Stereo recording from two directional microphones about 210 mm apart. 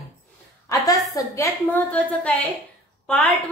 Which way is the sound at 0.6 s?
15° left (ahead or behind).